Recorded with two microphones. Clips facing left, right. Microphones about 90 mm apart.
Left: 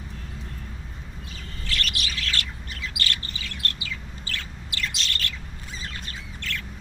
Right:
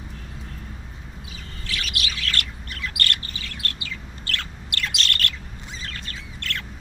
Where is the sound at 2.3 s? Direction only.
55° right (ahead or behind).